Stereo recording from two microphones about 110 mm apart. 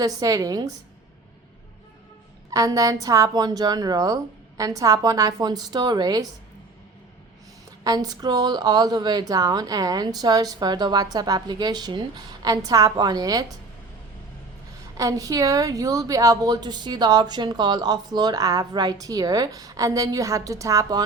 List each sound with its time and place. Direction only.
0.0 s a woman's voice: 30° right (ahead or behind)
2.5 s a woman's voice: 30° right (ahead or behind)
7.9 s a woman's voice: 35° right (ahead or behind)
14.9 s a woman's voice: 30° right (ahead or behind)